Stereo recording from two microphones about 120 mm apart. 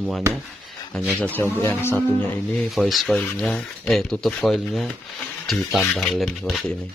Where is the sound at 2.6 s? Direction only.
Centre (ahead or behind).